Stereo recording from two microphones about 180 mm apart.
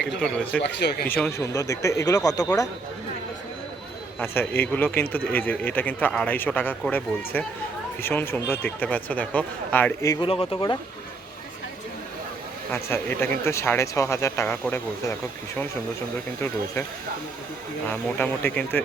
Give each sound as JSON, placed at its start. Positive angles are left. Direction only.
{"t": 0.2, "sound": "speech", "side_deg": 5}
{"t": 0.6, "sound": "speech", "side_deg": 65}
{"t": 1.1, "sound": "speech", "side_deg": 15}
{"t": 4.2, "sound": "speech", "side_deg": 10}
{"t": 10.2, "sound": "speech", "side_deg": 30}
{"t": 12.7, "sound": "speech", "side_deg": 10}
{"t": 18.2, "sound": "speech", "side_deg": 10}